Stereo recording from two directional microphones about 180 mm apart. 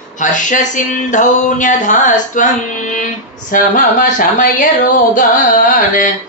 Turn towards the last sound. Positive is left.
turn(degrees=45)  # may be behind; listen again after turning